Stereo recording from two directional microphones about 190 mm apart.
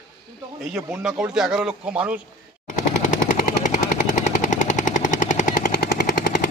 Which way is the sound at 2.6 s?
40° left (ahead or behind).